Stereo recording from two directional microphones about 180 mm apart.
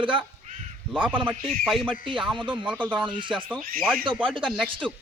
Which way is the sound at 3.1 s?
25° right (ahead or behind).